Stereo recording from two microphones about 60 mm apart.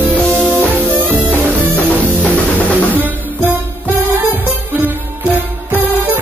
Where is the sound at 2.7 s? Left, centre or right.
Right.